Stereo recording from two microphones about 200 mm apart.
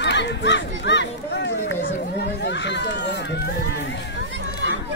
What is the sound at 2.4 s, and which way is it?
Run, 60° left (ahead or behind).